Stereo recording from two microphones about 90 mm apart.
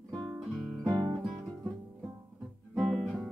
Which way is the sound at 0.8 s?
40° right (ahead or behind).